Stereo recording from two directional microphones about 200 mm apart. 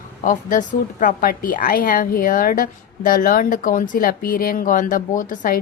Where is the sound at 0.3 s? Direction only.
40° left (ahead or behind).